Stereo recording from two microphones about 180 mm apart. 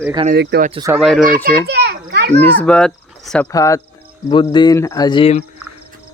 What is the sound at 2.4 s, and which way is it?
Speech, 10° left (ahead or behind).